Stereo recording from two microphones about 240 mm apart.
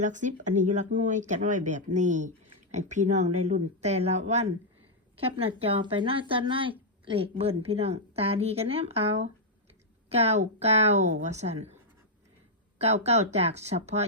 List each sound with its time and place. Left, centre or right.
0.0 s speech: right
12.8 s speech: right